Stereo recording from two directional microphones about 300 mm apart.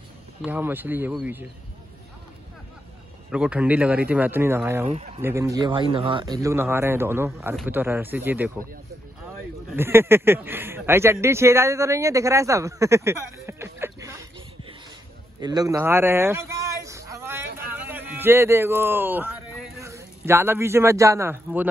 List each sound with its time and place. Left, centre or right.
0.4 s speech: centre
3.3 s speech: centre
4.8 s speech: right
5.2 s speech: centre
9.7 s speech: centre
15.4 s a sound: centre
17.7 s a man's voice: centre